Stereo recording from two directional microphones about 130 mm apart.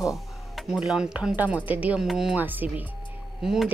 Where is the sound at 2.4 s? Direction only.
15° right (ahead or behind).